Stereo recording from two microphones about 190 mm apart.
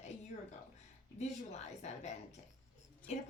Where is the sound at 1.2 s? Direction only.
35° left (ahead or behind).